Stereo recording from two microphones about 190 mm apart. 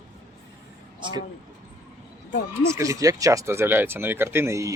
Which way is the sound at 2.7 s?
15° right (ahead or behind).